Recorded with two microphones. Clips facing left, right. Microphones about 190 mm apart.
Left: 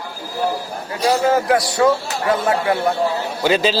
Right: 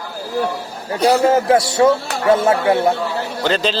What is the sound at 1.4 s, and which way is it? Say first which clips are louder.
Music: right 3 dB; 25° right (ahead or behind).